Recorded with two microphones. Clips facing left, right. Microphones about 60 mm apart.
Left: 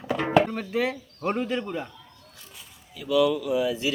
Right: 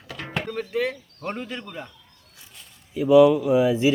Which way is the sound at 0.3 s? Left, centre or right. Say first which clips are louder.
Left 8 dB; centre.